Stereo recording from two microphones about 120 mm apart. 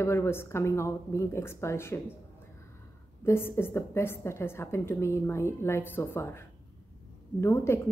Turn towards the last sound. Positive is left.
turn(degrees=20)  # may be behind; listen again after turning